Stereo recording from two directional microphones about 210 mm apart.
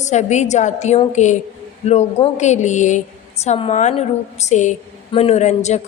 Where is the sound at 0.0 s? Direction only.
35° left (ahead or behind).